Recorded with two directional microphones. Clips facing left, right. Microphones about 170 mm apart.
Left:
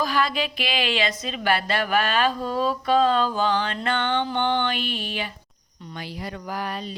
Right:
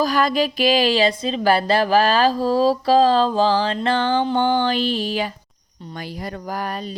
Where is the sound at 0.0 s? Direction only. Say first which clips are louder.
Right 6 dB; 40° right (ahead or behind).